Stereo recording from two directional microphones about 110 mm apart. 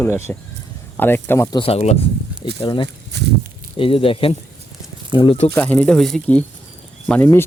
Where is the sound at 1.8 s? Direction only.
80° left.